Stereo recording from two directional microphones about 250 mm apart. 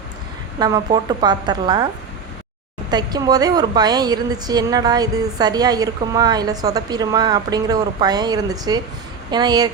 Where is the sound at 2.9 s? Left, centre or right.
Centre.